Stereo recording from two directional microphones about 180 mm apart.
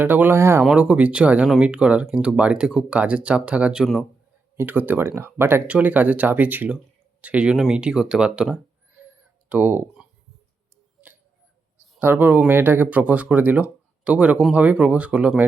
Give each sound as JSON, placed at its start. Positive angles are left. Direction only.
{"t": 0.0, "sound": "speech", "side_deg": -10}
{"t": 9.0, "sound": "a sound", "side_deg": -10}
{"t": 9.5, "sound": "speech", "side_deg": -10}
{"t": 11.9, "sound": "speech", "side_deg": -10}